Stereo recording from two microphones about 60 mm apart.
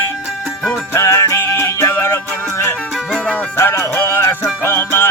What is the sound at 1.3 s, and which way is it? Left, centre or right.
Music, left.